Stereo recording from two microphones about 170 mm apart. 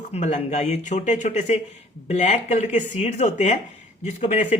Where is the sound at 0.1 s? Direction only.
45° left (ahead or behind).